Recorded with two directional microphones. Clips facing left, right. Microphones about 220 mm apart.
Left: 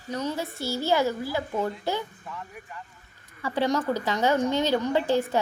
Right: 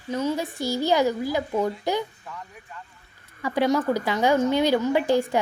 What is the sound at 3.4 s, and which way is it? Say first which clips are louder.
A woman's voice: right 3 dB; 10° right (ahead or behind).